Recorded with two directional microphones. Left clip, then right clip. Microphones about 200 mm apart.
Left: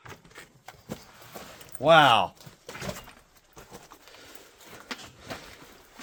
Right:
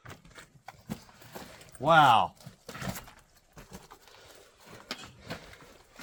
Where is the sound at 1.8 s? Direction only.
25° left (ahead or behind).